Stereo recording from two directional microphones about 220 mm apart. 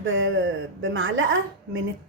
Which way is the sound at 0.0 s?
60° right (ahead or behind).